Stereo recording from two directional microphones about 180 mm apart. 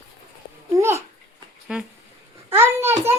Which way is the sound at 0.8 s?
15° right (ahead or behind).